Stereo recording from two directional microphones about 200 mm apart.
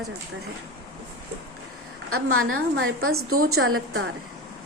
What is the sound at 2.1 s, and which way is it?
A woman's voice, 90° right.